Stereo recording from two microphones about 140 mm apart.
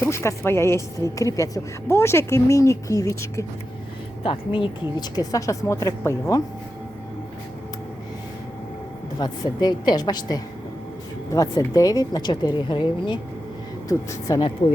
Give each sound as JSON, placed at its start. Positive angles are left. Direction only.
{"t": 0.0, "sound": "speech", "side_deg": 20}
{"t": 4.2, "sound": "speech", "side_deg": 40}
{"t": 9.1, "sound": "speech", "side_deg": 30}